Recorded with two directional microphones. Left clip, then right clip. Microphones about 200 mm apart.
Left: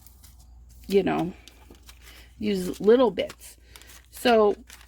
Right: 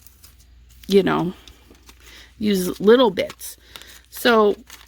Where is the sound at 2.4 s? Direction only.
45° right (ahead or behind).